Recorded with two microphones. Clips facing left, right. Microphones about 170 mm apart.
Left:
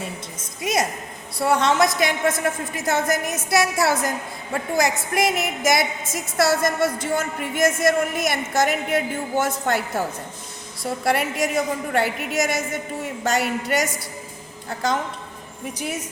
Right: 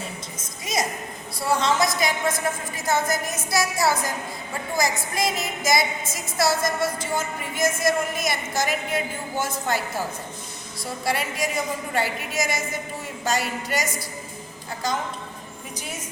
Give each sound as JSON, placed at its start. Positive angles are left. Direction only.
{"t": 0.6, "sound": "a woman's voice", "side_deg": 60}